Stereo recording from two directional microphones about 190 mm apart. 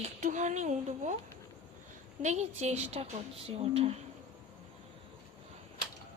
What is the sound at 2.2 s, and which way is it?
A woman's voice, 40° right (ahead or behind).